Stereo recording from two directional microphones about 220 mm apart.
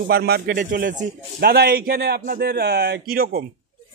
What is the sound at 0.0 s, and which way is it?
Speech, 45° right (ahead or behind).